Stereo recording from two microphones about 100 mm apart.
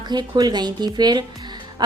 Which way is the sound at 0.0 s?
45° right (ahead or behind).